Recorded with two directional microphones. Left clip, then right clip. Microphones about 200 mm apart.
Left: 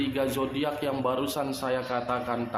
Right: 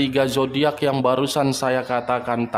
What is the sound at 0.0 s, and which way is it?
A man's voice, 50° right (ahead or behind).